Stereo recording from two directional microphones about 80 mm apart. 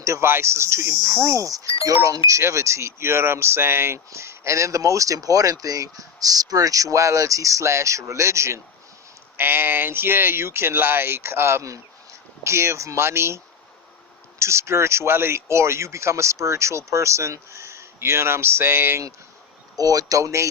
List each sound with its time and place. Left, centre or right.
0.0 s speech: right
9.4 s speech: right
19.7 s speech: right